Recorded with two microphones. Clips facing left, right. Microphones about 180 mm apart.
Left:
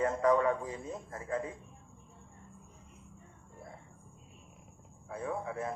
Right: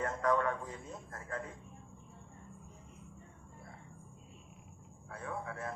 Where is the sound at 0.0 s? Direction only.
10° left (ahead or behind).